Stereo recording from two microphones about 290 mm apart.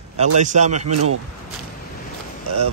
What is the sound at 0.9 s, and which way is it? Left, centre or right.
Speech, right.